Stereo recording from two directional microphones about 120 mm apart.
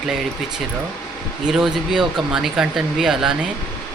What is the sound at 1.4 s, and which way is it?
Speech, 5° right (ahead or behind).